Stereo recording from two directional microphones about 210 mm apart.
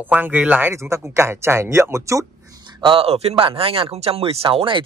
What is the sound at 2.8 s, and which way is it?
Speech, 25° right (ahead or behind).